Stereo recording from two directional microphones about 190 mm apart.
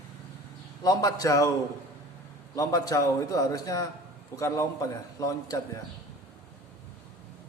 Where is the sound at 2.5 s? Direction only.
20° left (ahead or behind).